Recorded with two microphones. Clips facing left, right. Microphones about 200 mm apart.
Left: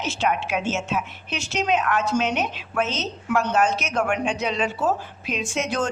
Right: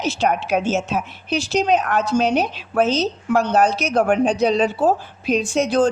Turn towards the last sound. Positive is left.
turn(degrees=-30)  # may be behind; listen again after turning